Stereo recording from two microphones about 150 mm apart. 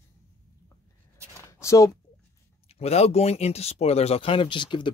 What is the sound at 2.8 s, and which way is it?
Speech, 45° left (ahead or behind).